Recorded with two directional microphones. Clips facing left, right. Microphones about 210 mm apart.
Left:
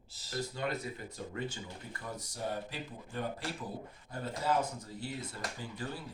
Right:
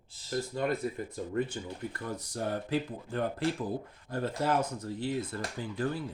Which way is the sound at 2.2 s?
60° right (ahead or behind).